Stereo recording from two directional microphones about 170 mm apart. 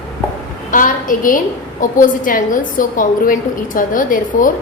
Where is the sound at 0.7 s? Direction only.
50° left (ahead or behind).